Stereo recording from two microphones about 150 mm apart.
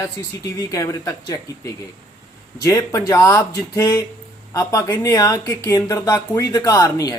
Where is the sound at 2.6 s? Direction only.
20° left (ahead or behind).